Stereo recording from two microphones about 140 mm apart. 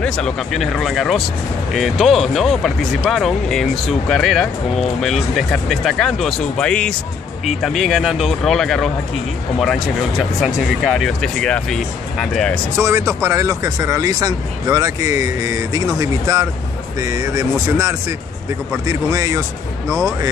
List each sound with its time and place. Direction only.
0.0 s speech: 5° left (ahead or behind)
12.7 s speech: 20° right (ahead or behind)